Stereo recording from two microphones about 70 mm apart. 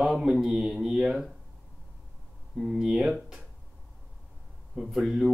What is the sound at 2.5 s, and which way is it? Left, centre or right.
Speech, centre.